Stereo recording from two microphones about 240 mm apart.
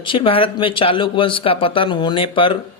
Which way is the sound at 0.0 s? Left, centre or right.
Left.